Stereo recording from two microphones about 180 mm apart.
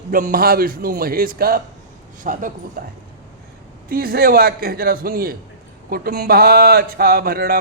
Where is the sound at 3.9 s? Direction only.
55° right (ahead or behind).